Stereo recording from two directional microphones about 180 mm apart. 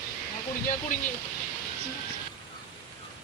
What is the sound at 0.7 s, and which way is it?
Speech, 45° left (ahead or behind).